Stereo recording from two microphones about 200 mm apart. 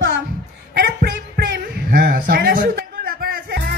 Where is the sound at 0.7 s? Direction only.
50° right (ahead or behind).